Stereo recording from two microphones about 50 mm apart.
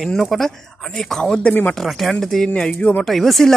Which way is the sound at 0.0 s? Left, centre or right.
Centre.